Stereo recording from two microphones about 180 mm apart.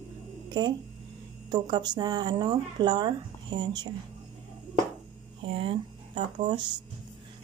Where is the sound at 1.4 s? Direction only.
20° right (ahead or behind).